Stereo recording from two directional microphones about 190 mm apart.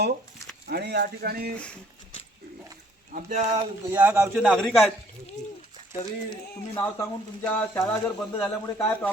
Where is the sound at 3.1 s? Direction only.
45° right (ahead or behind).